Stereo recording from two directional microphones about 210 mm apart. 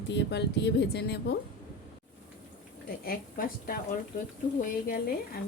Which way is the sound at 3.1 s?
45° left (ahead or behind).